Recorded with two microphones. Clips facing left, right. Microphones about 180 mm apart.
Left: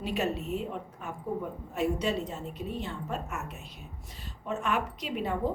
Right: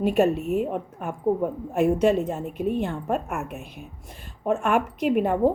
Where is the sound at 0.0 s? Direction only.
55° right (ahead or behind).